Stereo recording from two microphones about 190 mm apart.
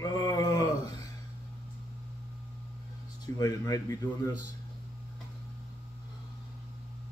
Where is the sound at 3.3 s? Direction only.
20° left (ahead or behind).